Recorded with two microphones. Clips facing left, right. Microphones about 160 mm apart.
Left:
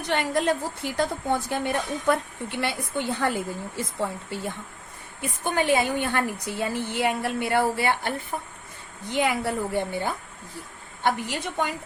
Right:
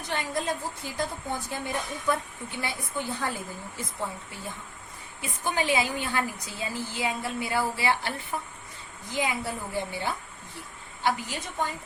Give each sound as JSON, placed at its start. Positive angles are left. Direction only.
{"t": 0.1, "sound": "a woman's voice", "side_deg": 70}
{"t": 5.2, "sound": "a woman's voice", "side_deg": 55}
{"t": 9.0, "sound": "a woman's voice", "side_deg": 70}
{"t": 11.0, "sound": "a woman's voice", "side_deg": 65}